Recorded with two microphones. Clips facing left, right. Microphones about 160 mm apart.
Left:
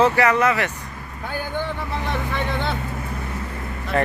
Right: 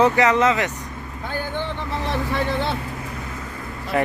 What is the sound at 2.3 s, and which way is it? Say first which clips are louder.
Speech: right 3 dB; 30° right (ahead or behind).